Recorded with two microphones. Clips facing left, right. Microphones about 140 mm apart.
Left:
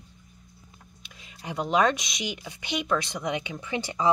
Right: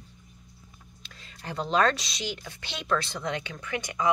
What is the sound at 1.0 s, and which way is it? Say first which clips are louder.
Speech: left 2 dB; 15° left (ahead or behind).